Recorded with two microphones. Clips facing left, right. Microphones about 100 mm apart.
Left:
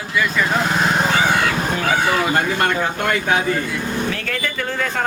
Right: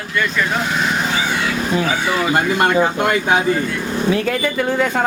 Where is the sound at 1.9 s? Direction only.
50° left (ahead or behind).